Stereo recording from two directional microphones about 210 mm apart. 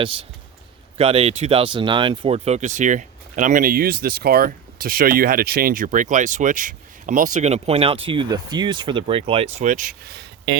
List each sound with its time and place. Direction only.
0.9 s speech: 25° right (ahead or behind); by 10.6 s 55° right (ahead or behind)